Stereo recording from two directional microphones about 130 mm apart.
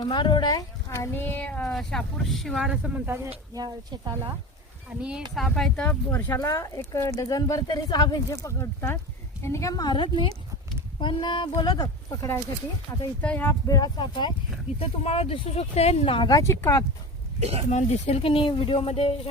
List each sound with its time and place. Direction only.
0.0 s speech: 35° left (ahead or behind); by 3.0 s 5° right (ahead or behind)
3.5 s speech: 30° right (ahead or behind)
4.9 s a woman's voice: 5° right (ahead or behind); by 12.4 s 30° left (ahead or behind)
13.2 s speech: 10° left (ahead or behind)
13.7 s a woman's voice: 30° left (ahead or behind)
14.8 s speech: 50° left (ahead or behind)
16.3 s speech: 25° left (ahead or behind)
17.4 s speech: 50° right (ahead or behind)
17.7 s speech: 65° left (ahead or behind)